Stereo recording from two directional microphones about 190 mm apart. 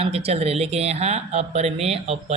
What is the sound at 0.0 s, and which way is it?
A woman's voice, 30° right (ahead or behind).